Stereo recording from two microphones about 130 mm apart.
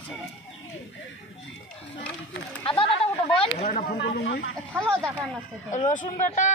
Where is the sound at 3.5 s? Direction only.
55° left (ahead or behind).